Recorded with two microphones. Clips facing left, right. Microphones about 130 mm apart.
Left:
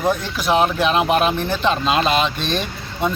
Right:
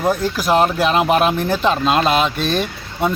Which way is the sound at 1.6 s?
Centre (ahead or behind).